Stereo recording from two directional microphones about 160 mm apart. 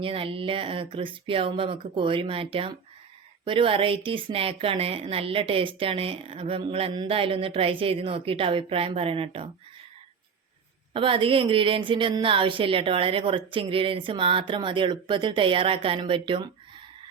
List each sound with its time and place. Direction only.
0.0 s speech: 35° right (ahead or behind)
10.9 s speech: 30° right (ahead or behind)